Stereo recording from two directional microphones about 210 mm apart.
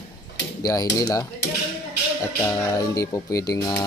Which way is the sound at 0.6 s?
15° left (ahead or behind).